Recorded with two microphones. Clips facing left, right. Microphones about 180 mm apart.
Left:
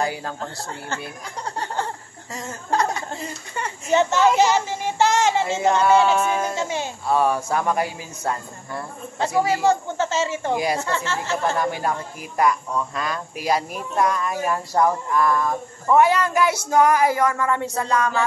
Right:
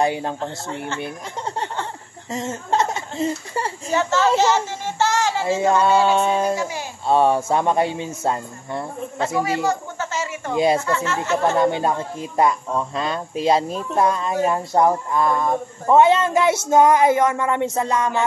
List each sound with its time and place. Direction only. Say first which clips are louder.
0.0 s speech: right 5 dB; 25° right (ahead or behind)
2.3 s laughter: right 3 dB; 25° right (ahead or behind)
3.9 s speech: left 2 dB; 20° left (ahead or behind)
4.4 s child singing: even; 15° left (ahead or behind)
5.6 s speech: right 1 dB; 25° right (ahead or behind)
6.5 s speech: right 1 dB; 25° left (ahead or behind)
7.1 s speech: right 4 dB; 25° right (ahead or behind)
9.4 s speech: left 4 dB; 25° left (ahead or behind)
11.4 s speech: right 5 dB; 25° right (ahead or behind)